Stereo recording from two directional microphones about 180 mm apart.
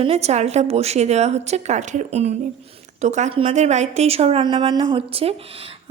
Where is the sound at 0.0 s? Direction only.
35° right (ahead or behind).